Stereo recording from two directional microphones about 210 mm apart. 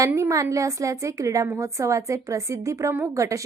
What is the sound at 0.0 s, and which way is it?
A woman's voice, 15° right (ahead or behind).